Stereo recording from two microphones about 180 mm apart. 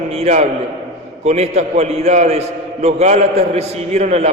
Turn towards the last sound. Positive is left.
turn(degrees=-35)  # may be behind; listen again after turning